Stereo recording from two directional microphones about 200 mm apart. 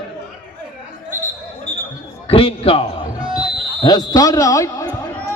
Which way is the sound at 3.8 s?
20° left (ahead or behind).